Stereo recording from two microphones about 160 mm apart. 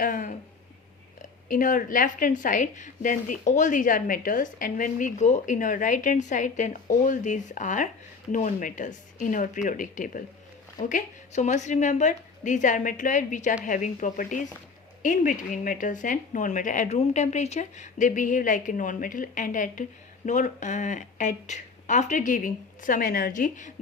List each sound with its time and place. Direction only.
0.0 s speech: 55° left (ahead or behind)
1.5 s a woman's voice: 55° left (ahead or behind)